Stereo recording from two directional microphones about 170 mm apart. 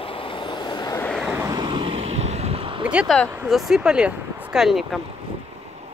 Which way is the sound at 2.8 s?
5° right (ahead or behind).